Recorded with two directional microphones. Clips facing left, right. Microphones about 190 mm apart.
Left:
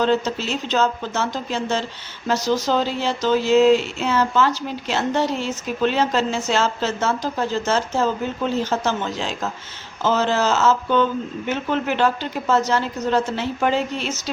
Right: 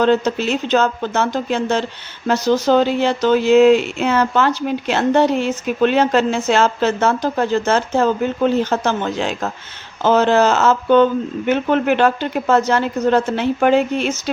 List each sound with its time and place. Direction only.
0.0 s speech: 60° right (ahead or behind)